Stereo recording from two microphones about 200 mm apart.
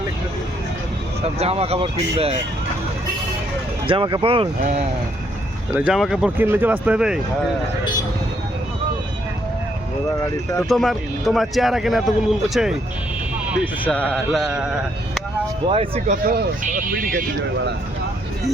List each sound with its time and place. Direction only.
1.2 s speech: 30° right (ahead or behind)
3.8 s speech: 25° right (ahead or behind)
5.7 s speech: 5° right (ahead or behind)
10.7 s speech: centre (ahead or behind)
13.8 s speech: 5° left (ahead or behind)
15.6 s speech: 25° right (ahead or behind); by 17.2 s 45° right (ahead or behind)